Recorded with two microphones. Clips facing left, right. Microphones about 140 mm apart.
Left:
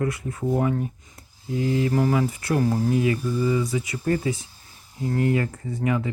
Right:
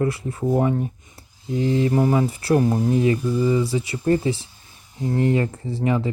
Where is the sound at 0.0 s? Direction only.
30° right (ahead or behind).